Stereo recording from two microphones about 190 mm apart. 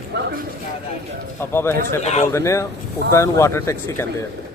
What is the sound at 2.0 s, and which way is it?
Speech, 35° left (ahead or behind).